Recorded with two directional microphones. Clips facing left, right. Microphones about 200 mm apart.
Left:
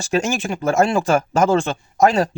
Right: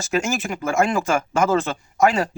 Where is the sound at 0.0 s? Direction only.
30° left (ahead or behind).